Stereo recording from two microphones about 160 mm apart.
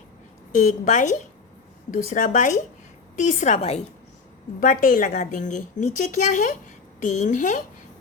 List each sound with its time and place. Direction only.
0.5 s a woman's voice: 55° left (ahead or behind)
4.6 s a woman's voice: 55° left (ahead or behind)